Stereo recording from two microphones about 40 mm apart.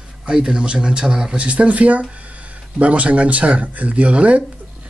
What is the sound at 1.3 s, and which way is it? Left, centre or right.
Speech, right.